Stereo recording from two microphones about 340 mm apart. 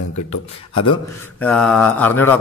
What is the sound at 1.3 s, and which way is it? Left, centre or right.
Mantra, centre.